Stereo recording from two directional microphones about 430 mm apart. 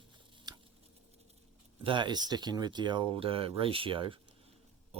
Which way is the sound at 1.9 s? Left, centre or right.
Centre.